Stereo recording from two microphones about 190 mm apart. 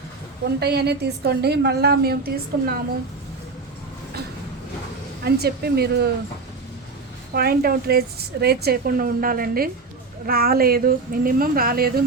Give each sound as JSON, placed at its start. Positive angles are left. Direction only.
{"t": 0.4, "sound": "a woman's voice", "side_deg": -60}
{"t": 5.2, "sound": "a woman's voice", "side_deg": -55}
{"t": 7.3, "sound": "a woman's voice", "side_deg": -50}